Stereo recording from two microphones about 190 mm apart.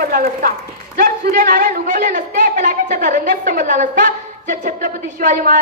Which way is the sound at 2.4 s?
40° right (ahead or behind).